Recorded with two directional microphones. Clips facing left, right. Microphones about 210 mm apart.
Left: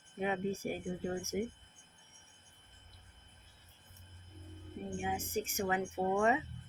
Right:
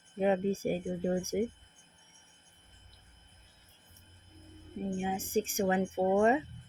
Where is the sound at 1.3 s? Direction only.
35° right (ahead or behind).